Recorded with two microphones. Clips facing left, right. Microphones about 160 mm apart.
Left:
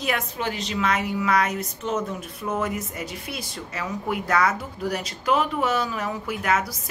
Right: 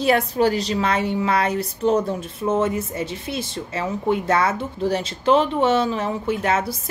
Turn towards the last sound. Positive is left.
turn(degrees=-30)  # may be behind; listen again after turning